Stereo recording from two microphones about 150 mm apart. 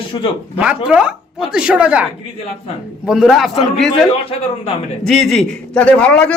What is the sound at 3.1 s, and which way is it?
A man's voice, centre (ahead or behind).